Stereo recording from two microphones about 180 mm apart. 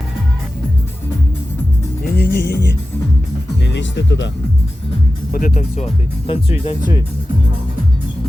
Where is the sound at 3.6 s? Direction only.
80° left.